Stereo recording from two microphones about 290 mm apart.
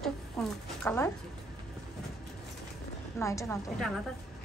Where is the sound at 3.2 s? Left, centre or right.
Centre.